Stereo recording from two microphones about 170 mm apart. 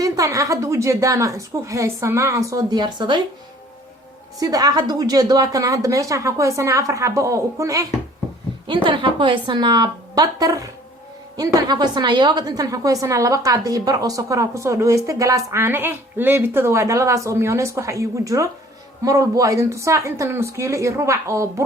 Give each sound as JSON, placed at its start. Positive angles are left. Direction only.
{"t": 0.0, "sound": "a woman's voice", "side_deg": -20}
{"t": 4.4, "sound": "a woman's voice", "side_deg": -20}